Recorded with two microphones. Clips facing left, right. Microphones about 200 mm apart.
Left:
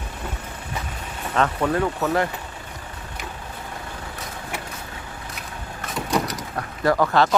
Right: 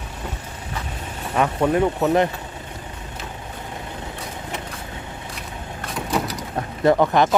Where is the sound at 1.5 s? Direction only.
20° right (ahead or behind).